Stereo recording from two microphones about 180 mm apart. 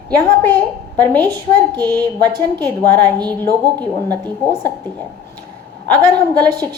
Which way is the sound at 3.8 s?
10° left (ahead or behind).